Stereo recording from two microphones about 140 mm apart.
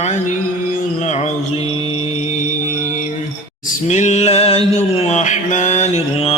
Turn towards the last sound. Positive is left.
turn(degrees=45)  # may be behind; listen again after turning